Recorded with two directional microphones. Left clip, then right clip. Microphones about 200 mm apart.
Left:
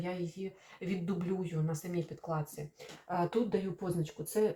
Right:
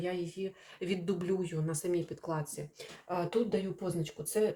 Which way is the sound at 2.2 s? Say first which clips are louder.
Right 1 dB; 45° right (ahead or behind).